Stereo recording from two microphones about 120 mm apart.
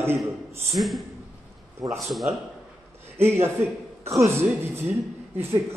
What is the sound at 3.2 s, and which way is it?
A man's voice, 20° right (ahead or behind).